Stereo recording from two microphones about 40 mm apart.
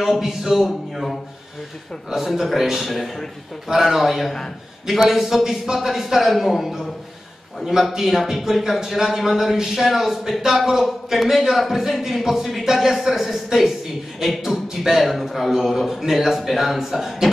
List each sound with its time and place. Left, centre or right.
0.0 s a man's voice: centre
2.0 s a man's voice: centre
7.9 s a man's voice: centre